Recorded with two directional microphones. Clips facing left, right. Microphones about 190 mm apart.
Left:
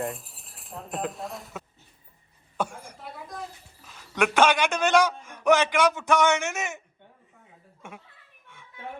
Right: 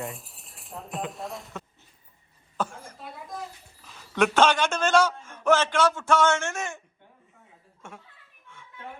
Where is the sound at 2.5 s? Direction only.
15° left (ahead or behind).